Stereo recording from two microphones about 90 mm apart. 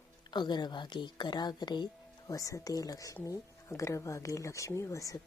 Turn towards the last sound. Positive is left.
turn(degrees=35)  # may be behind; listen again after turning